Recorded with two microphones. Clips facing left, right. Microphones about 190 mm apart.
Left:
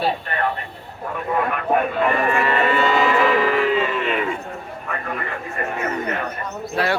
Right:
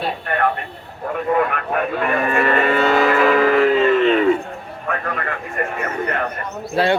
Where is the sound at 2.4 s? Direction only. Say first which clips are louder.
Right 2 dB; 50° right (ahead or behind).